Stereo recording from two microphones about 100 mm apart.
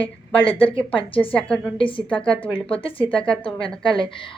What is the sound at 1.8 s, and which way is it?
A woman's voice, 60° left (ahead or behind).